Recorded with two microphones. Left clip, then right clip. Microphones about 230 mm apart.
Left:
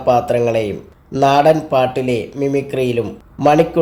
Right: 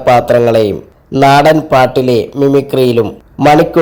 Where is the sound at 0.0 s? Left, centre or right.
Right.